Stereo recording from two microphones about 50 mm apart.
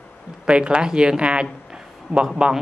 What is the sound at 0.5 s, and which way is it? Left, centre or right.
Speech, right.